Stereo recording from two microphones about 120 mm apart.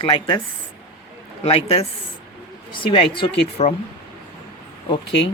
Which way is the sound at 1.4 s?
55° left (ahead or behind).